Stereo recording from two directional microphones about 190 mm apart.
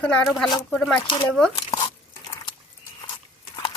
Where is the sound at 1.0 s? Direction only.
25° left (ahead or behind).